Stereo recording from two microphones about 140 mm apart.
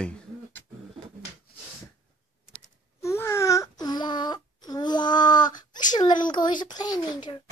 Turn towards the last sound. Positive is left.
turn(degrees=30)  # may be behind; listen again after turning